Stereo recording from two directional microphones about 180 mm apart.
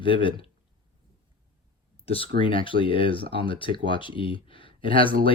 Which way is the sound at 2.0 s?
30° left (ahead or behind).